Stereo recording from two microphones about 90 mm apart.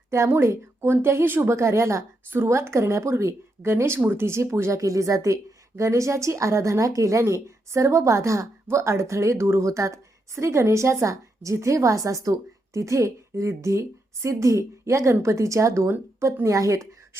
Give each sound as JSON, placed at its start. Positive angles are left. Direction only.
{"t": 0.1, "sound": "a woman's voice", "side_deg": -30}